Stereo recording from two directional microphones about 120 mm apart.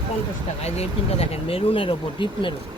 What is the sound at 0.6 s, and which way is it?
Speech, 60° left (ahead or behind).